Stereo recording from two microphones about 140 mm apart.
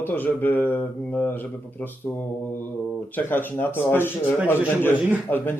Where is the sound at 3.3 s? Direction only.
15° left (ahead or behind).